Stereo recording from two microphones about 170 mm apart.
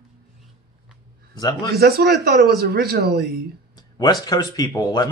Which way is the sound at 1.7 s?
65° right (ahead or behind).